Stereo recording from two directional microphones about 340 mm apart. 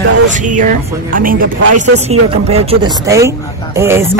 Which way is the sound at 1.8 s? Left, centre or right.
Centre.